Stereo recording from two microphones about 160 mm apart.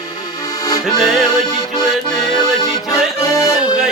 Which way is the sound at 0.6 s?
20° left (ahead or behind).